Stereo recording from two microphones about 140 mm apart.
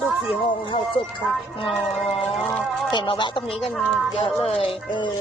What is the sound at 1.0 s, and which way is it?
Speech, 40° left (ahead or behind).